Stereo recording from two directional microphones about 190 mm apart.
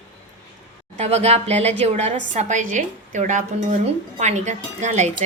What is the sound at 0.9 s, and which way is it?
A woman's voice, 35° right (ahead or behind).